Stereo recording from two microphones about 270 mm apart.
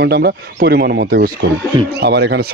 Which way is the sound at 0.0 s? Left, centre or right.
Right.